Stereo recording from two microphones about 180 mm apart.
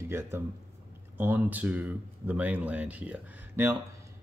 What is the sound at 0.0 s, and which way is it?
Speech, 15° right (ahead or behind).